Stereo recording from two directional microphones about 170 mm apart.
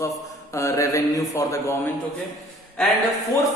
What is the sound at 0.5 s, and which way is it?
A woman's voice, 20° left (ahead or behind).